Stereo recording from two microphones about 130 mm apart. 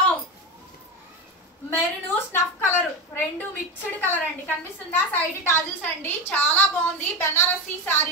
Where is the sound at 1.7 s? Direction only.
15° left (ahead or behind).